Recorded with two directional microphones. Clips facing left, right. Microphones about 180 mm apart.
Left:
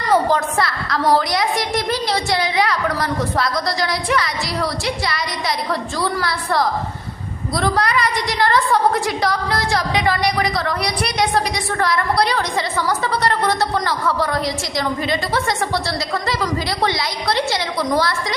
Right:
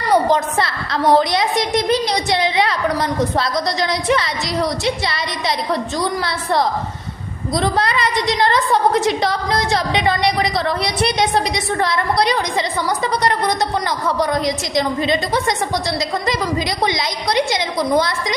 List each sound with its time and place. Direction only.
0.1 s a woman's voice: 20° right (ahead or behind)